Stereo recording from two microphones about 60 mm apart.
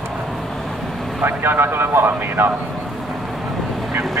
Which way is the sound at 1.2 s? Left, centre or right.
Right.